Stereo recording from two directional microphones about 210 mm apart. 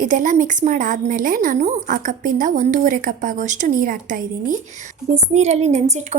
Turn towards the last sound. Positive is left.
turn(degrees=-35)  # may be behind; listen again after turning